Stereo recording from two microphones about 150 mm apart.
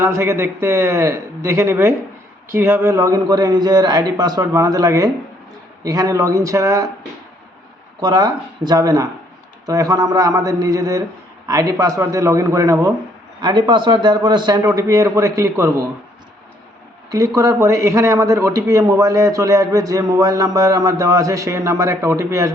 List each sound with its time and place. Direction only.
0.0 s a man's voice: 20° right (ahead or behind)
8.0 s a man's voice: 30° right (ahead or behind)
17.1 s a man's voice: 25° right (ahead or behind)